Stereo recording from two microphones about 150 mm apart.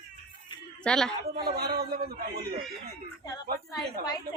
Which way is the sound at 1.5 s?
90° right.